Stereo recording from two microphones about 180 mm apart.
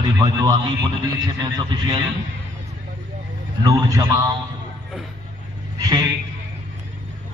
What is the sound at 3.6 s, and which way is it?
Speech, 20° right (ahead or behind).